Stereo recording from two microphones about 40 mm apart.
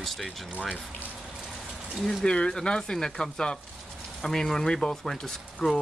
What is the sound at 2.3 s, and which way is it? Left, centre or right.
Speech, left.